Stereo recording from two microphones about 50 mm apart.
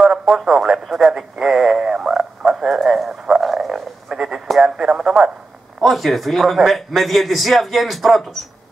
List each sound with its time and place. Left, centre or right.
0.5 s radio: centre
5.8 s a man's voice: centre